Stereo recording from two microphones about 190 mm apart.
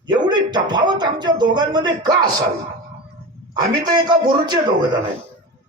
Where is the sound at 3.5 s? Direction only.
20° right (ahead or behind).